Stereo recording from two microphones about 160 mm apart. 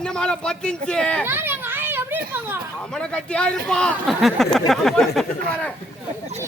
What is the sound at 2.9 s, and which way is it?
Speech, 5° left (ahead or behind).